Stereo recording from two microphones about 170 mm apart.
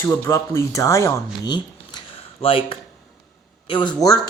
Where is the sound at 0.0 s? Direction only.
15° left (ahead or behind).